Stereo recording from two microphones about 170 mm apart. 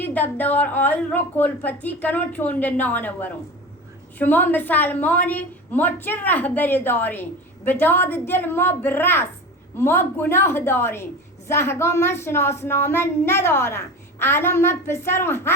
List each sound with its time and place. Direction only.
0.0 s a woman's voice: 10° left (ahead or behind)